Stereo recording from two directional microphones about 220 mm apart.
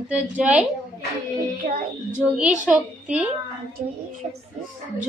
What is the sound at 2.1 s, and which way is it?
A woman's voice, 5° right (ahead or behind).